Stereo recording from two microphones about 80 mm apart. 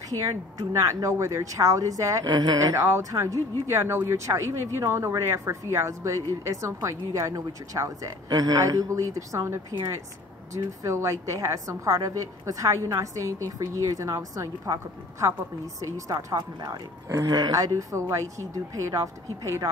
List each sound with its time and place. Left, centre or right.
0.1 s a woman's voice: right